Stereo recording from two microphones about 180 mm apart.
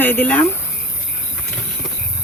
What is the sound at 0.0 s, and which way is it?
Speech, 10° left (ahead or behind).